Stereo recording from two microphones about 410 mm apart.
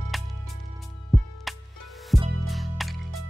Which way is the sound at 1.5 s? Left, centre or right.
Centre.